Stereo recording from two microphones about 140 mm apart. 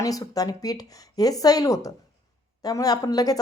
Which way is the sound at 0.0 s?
25° left (ahead or behind).